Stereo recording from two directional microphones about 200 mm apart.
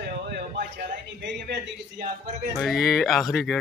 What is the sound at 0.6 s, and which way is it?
A man's voice, 50° right (ahead or behind).